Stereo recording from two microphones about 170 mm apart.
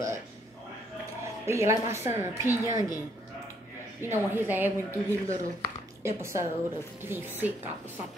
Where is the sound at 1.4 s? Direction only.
15° right (ahead or behind).